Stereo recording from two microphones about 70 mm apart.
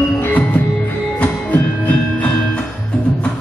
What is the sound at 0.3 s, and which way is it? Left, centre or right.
Music, left.